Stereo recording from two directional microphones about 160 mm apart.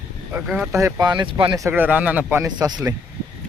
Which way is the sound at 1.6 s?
10° right (ahead or behind).